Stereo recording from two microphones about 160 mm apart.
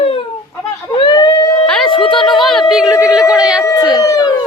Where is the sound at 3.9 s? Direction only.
20° left (ahead or behind).